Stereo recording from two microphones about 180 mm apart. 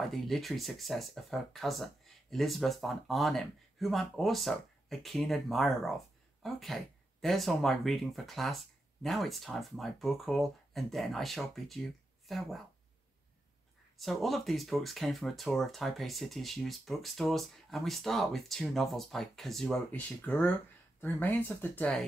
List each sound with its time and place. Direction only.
0.1 s speech: centre (ahead or behind)
13.9 s speech: centre (ahead or behind)